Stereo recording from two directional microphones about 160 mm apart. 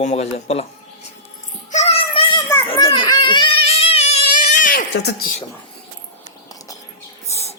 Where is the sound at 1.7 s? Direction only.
40° left (ahead or behind).